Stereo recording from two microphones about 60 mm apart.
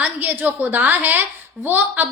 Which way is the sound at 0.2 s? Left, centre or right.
Right.